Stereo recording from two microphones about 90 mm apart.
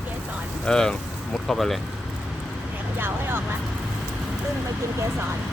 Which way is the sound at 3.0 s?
25° right (ahead or behind).